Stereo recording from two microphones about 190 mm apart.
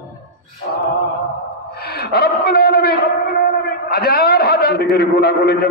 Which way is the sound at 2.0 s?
55° left (ahead or behind).